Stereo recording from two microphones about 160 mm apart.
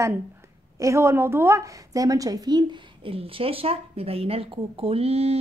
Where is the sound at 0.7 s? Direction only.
20° right (ahead or behind).